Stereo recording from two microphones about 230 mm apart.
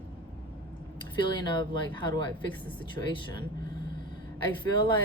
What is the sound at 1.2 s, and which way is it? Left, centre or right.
Speech, centre.